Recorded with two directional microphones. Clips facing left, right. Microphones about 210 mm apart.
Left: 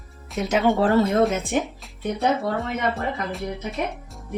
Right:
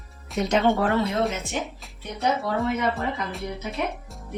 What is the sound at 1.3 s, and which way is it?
Speech, 50° left (ahead or behind).